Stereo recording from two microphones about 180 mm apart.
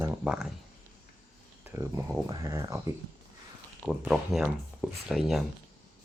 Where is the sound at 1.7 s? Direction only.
15° right (ahead or behind).